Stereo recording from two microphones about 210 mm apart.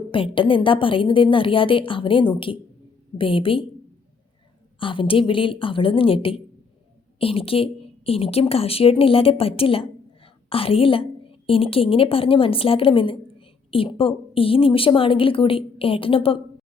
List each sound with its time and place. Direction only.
0.1 s a woman's voice: 25° left (ahead or behind)
4.8 s a woman's voice: 25° left (ahead or behind)